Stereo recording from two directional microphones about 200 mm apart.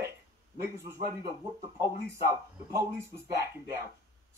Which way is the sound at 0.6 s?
10° right (ahead or behind).